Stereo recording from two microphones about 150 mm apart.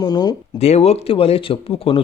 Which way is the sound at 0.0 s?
25° left (ahead or behind).